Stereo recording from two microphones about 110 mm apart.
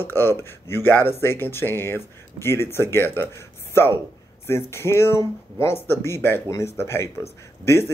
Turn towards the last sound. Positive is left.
turn(degrees=25)  # may be behind; listen again after turning